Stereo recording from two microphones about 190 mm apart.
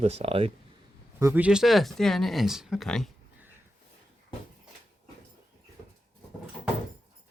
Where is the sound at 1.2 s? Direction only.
10° right (ahead or behind).